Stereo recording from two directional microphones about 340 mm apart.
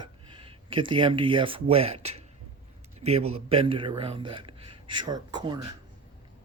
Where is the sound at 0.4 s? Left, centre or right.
Centre.